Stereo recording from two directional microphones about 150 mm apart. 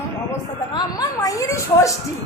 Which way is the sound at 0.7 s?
25° left (ahead or behind).